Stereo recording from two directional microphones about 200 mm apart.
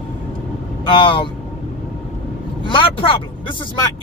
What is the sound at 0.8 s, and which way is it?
Speech, 25° left (ahead or behind).